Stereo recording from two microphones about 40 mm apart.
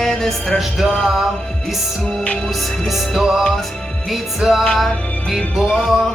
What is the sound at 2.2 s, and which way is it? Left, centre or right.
Music, left.